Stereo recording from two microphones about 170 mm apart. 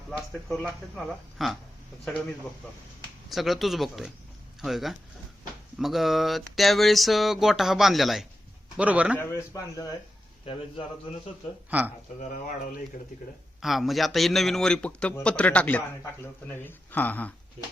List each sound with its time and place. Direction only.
0.1 s speech: centre (ahead or behind)
3.2 s speech: centre (ahead or behind)
9.1 s speech: 15° left (ahead or behind)
11.7 s speech: 10° right (ahead or behind)
12.3 s speech: 50° left (ahead or behind)
13.6 s speech: centre (ahead or behind)